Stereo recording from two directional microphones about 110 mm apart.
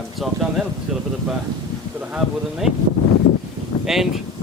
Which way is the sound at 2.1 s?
5° right (ahead or behind).